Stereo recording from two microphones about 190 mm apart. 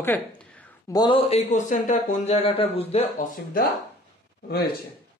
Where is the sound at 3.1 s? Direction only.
45° left (ahead or behind).